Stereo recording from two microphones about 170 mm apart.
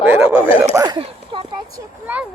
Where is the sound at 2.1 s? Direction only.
10° right (ahead or behind).